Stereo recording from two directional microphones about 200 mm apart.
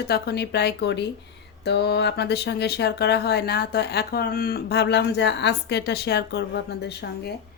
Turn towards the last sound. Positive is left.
turn(degrees=55)  # may be behind; listen again after turning